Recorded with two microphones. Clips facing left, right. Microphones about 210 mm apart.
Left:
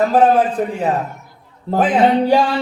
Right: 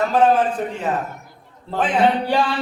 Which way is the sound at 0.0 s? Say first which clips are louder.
Left 4 dB; 35° left (ahead or behind).